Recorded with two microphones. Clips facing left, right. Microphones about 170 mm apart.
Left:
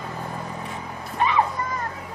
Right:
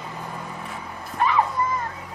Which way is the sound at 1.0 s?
Centre (ahead or behind).